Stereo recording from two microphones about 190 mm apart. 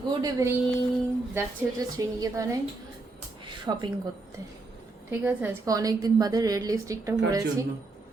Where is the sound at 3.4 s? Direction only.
25° right (ahead or behind).